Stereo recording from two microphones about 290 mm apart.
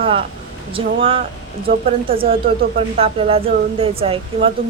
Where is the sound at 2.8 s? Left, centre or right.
Centre.